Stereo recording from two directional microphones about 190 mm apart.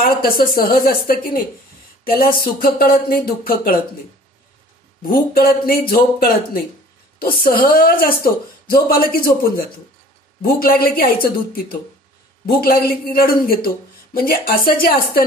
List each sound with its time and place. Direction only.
0.0 s a woman's voice: 50° left (ahead or behind)
5.0 s a woman's voice: 50° left (ahead or behind)